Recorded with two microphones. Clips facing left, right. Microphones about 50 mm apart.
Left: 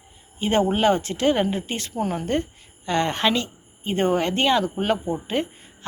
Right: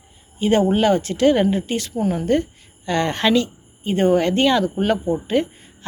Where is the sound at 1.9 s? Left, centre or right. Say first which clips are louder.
Right 3 dB; left.